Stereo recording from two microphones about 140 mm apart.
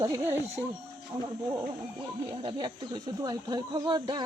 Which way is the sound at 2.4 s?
30° right (ahead or behind).